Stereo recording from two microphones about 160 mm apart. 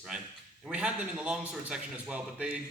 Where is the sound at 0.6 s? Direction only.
5° right (ahead or behind).